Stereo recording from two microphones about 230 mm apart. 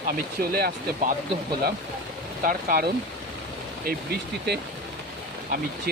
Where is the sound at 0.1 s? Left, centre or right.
Right.